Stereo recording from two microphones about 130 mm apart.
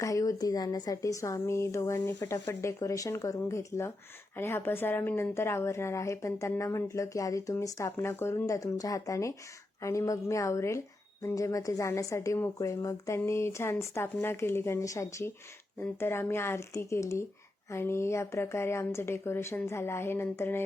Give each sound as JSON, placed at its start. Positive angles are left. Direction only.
{"t": 0.0, "sound": "a woman's voice", "side_deg": 25}